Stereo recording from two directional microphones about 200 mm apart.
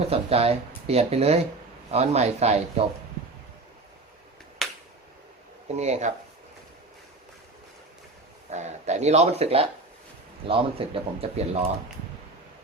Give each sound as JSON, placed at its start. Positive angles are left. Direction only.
{"t": 0.1, "sound": "speech", "side_deg": -30}
{"t": 4.6, "sound": "a sound", "side_deg": 0}
{"t": 5.6, "sound": "speech", "side_deg": -35}
{"t": 8.4, "sound": "speech", "side_deg": -35}